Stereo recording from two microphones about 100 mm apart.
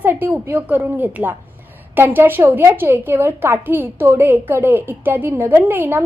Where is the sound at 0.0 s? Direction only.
20° right (ahead or behind).